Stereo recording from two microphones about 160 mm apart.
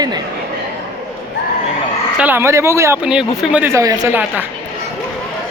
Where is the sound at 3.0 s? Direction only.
5° right (ahead or behind).